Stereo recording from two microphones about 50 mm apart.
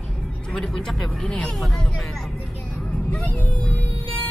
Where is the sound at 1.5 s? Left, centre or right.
Centre.